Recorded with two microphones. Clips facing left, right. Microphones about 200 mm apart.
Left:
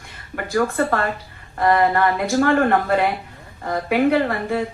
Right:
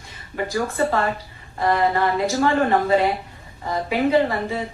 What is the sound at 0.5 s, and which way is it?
A woman's voice, 60° left (ahead or behind).